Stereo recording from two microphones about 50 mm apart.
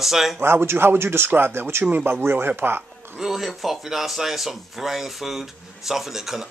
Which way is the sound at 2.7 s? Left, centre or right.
Right.